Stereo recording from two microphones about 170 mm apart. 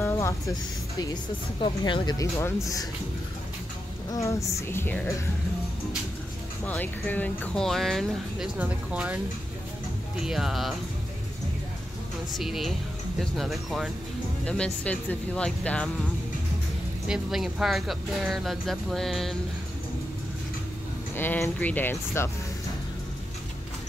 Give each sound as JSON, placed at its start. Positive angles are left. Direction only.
{"t": 0.0, "sound": "speech", "side_deg": 20}
{"t": 4.1, "sound": "speech", "side_deg": 20}
{"t": 6.6, "sound": "speech", "side_deg": 10}
{"t": 8.5, "sound": "speech", "side_deg": -10}
{"t": 12.4, "sound": "speech", "side_deg": 0}
{"t": 17.1, "sound": "speech", "side_deg": 0}
{"t": 21.2, "sound": "speech", "side_deg": 10}